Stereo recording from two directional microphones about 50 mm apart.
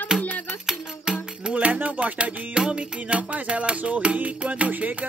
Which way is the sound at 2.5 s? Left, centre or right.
Centre.